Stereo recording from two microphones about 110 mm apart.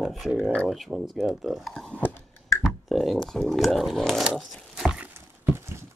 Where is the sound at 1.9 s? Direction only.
15° left (ahead or behind).